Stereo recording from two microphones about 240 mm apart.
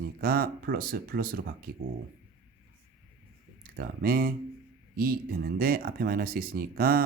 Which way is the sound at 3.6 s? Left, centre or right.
Right.